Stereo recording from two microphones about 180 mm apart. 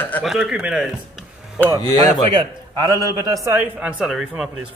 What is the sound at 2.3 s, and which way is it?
A man's voice, 20° right (ahead or behind).